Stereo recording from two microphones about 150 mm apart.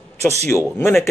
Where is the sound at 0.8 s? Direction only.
15° left (ahead or behind).